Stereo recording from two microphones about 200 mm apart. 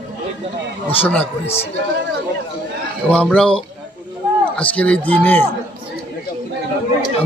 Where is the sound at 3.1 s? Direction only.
5° left (ahead or behind).